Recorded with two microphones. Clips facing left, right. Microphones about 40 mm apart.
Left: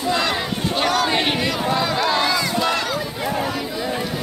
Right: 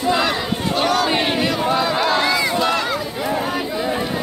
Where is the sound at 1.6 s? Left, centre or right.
Centre.